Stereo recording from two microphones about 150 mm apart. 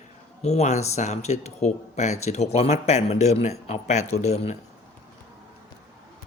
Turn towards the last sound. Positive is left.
turn(degrees=45)  # may be behind; listen again after turning